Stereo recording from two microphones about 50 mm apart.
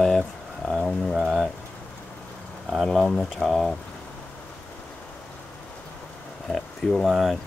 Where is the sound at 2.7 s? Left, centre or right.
Centre.